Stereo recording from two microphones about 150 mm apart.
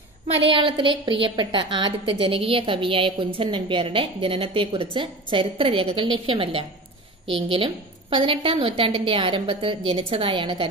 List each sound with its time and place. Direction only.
0.3 s a woman's voice: 35° right (ahead or behind)